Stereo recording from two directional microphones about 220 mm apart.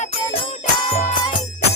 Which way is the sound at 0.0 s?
35° left (ahead or behind).